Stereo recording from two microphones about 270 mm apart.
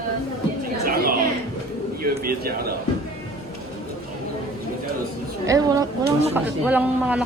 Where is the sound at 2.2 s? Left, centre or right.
Right.